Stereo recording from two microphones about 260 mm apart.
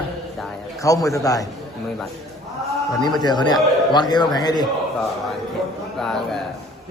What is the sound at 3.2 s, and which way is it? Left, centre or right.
A man's voice, centre.